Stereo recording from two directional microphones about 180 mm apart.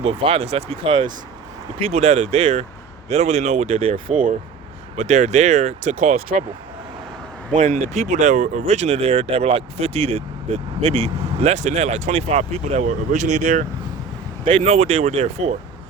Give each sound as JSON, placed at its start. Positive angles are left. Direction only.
{"t": 0.0, "sound": "speech", "side_deg": -30}
{"t": 3.9, "sound": "speech", "side_deg": -45}
{"t": 7.5, "sound": "speech", "side_deg": -45}